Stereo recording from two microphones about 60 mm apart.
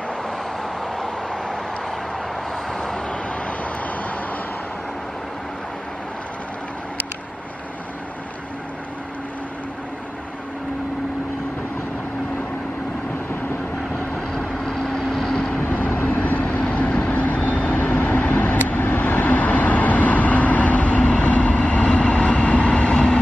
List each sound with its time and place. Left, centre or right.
0.9 s vehicle: centre
2.7 s vehicle: centre
14.3 s vehicle: centre
15.7 s vehicle: left